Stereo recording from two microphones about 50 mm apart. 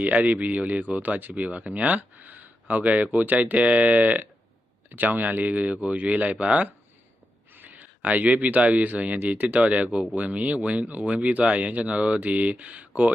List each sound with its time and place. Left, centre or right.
0.0 s speech: right
7.5 s speech: right